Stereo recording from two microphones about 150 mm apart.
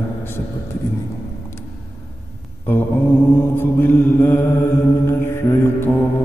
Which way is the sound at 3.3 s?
15° left (ahead or behind).